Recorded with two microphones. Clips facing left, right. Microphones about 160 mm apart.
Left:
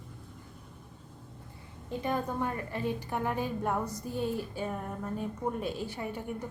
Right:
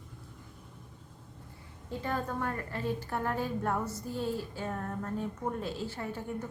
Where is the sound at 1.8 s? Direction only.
15° left (ahead or behind).